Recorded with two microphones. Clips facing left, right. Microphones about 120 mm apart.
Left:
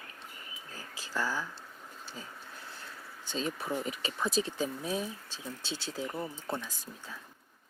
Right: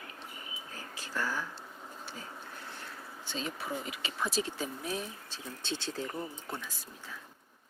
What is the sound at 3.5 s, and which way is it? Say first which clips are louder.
Speech: left 4 dB; 35° left (ahead or behind).